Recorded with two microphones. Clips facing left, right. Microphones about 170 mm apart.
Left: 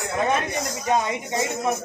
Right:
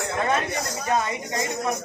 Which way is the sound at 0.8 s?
20° left (ahead or behind).